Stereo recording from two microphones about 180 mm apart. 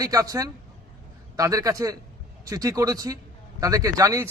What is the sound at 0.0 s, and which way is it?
Speech, 20° right (ahead or behind).